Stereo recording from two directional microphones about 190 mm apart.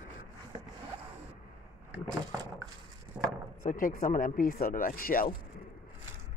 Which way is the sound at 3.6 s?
45° left (ahead or behind).